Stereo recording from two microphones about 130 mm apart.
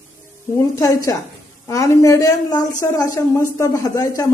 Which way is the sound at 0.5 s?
25° left (ahead or behind).